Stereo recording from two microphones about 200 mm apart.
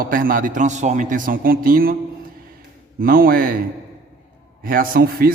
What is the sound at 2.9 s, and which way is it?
Speech, 45° right (ahead or behind).